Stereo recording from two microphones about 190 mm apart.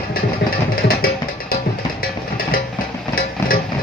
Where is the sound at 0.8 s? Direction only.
50° left (ahead or behind).